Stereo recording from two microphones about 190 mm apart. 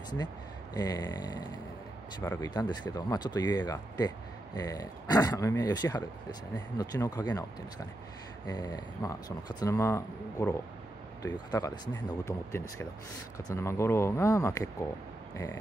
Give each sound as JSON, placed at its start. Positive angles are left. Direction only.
{"t": 0.7, "sound": "speech", "side_deg": 20}
{"t": 8.5, "sound": "speech", "side_deg": 20}